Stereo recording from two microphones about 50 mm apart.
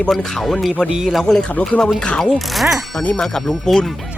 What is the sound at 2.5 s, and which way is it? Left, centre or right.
Speech, centre.